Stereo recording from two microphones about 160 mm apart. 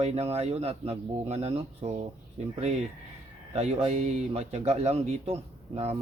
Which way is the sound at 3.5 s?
40° right (ahead or behind).